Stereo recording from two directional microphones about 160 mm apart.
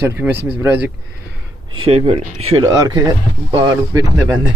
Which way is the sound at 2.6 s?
25° right (ahead or behind).